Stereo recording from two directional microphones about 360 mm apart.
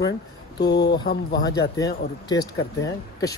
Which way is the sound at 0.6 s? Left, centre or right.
Left.